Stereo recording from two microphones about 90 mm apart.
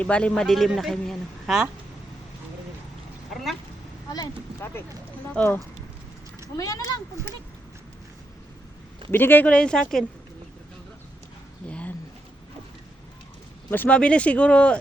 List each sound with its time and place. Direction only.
0.0 s speech: 15° left (ahead or behind); by 1.6 s centre (ahead or behind)
5.4 s speech: 15° left (ahead or behind)
6.6 s speech: 40° left (ahead or behind)
9.1 s speech: 20° left (ahead or behind)
11.7 s a sound: 15° left (ahead or behind)
13.7 s speech: 20° left (ahead or behind)